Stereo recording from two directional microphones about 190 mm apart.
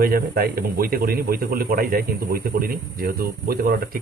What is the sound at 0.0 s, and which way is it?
A man's voice, 50° right (ahead or behind).